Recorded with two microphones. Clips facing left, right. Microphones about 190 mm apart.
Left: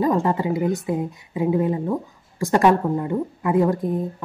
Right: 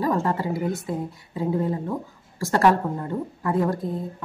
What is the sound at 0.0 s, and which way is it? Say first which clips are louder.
A woman's voice: left 4 dB; 15° left (ahead or behind).